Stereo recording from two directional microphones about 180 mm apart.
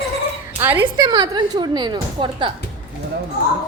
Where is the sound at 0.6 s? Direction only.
10° right (ahead or behind).